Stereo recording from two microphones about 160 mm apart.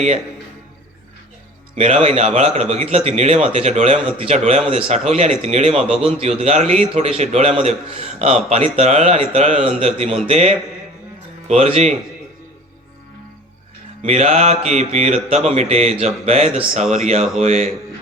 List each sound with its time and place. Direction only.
1.7 s a man's voice: 40° right (ahead or behind)
5.7 s a man's voice: 5° right (ahead or behind)
6.0 s a man's voice: 35° right (ahead or behind)
14.0 s a man's voice: 45° right (ahead or behind)